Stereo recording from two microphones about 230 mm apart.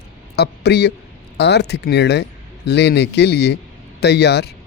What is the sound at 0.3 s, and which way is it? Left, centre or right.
Speech, left.